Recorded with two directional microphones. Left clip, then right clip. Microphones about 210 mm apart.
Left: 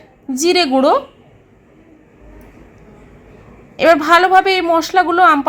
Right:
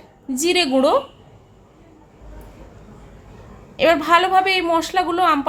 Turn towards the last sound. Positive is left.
turn(degrees=15)  # may be behind; listen again after turning